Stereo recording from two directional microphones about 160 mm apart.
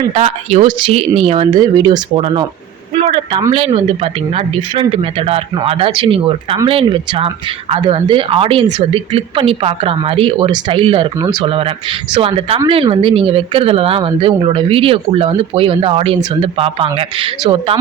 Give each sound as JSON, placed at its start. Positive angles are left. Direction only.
{"t": 0.1, "sound": "speech", "side_deg": -40}
{"t": 2.9, "sound": "a sound", "side_deg": -35}
{"t": 3.5, "sound": "speech", "side_deg": -35}